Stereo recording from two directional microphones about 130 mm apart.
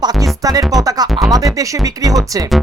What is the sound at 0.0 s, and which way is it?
Music, 30° right (ahead or behind).